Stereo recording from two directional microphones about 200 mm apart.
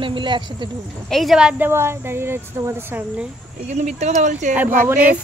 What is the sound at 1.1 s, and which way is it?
Speech, centre (ahead or behind).